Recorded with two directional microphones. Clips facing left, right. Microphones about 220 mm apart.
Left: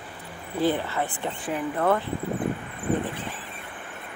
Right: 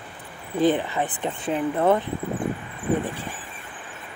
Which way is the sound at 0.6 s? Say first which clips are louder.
Right 4 dB; 20° right (ahead or behind).